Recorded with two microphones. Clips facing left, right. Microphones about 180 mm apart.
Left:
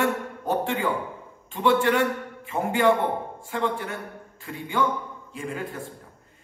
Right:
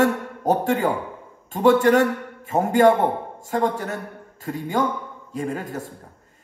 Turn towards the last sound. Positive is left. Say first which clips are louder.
# right 5 dB
turn(degrees=-40)  # may be behind; listen again after turning